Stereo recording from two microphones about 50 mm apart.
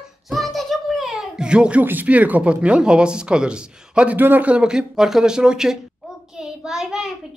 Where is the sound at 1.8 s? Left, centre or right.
Right.